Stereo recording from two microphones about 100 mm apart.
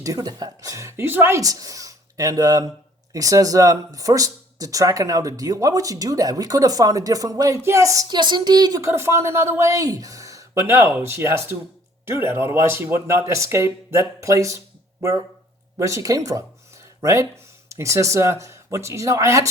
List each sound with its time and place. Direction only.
0.0 s speech: 35° right (ahead or behind); by 1.4 s 20° right (ahead or behind)
1.4 s speech: 35° right (ahead or behind)
8.1 s a sound: 45° right (ahead or behind)
8.8 s speech: 25° right (ahead or behind)